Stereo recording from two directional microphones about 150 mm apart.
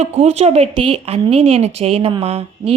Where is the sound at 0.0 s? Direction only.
45° right (ahead or behind).